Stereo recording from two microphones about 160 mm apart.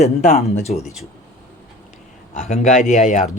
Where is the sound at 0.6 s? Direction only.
40° left (ahead or behind).